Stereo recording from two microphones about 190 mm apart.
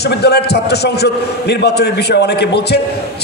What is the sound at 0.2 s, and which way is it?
A man's voice, 60° left (ahead or behind).